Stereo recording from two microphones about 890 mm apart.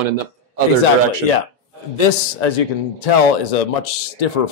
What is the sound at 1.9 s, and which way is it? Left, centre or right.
A man's voice, left.